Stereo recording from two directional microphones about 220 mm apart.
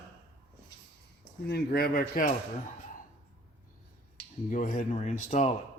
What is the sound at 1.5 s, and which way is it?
Speech, 45° left (ahead or behind).